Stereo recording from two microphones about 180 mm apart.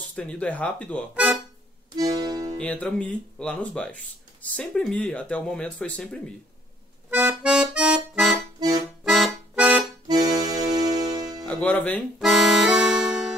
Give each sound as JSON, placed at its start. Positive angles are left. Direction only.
{"t": 0.1, "sound": "speech", "side_deg": 5}
{"t": 1.1, "sound": "speech", "side_deg": -5}
{"t": 2.0, "sound": "music", "side_deg": -20}
{"t": 2.6, "sound": "speech", "side_deg": 5}
{"t": 7.1, "sound": "accordion", "side_deg": -5}
{"t": 8.5, "sound": "accordion", "side_deg": -20}
{"t": 9.0, "sound": "accordion", "side_deg": 0}
{"t": 10.0, "sound": "music", "side_deg": -20}
{"t": 11.4, "sound": "speech", "side_deg": 10}
{"t": 12.2, "sound": "accordion", "side_deg": 0}